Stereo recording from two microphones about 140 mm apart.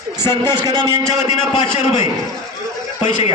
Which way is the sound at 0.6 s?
25° right (ahead or behind).